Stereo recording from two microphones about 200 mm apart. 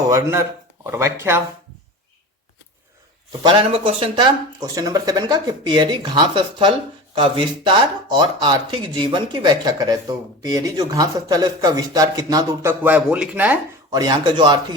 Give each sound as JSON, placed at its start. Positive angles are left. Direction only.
{"t": 0.1, "sound": "speech", "side_deg": -15}
{"t": 3.4, "sound": "speech", "side_deg": -25}
{"t": 13.9, "sound": "speech", "side_deg": -20}